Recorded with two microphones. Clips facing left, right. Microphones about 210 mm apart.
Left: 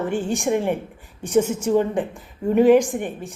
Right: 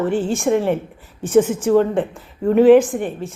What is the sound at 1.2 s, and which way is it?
Speech, 50° right (ahead or behind).